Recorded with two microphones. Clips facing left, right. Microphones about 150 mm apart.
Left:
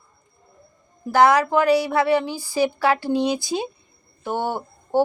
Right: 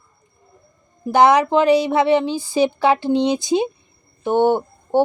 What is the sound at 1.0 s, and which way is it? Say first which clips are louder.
A woman's voice: right 3 dB; 20° right (ahead or behind).